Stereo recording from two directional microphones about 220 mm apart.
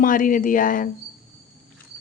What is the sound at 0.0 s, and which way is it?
Speech, 40° left (ahead or behind).